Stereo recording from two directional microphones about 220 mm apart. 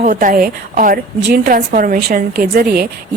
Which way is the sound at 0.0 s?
35° right (ahead or behind).